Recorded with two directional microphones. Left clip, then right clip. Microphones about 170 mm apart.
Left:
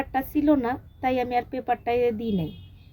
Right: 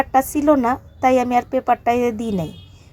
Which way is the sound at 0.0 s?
20° right (ahead or behind).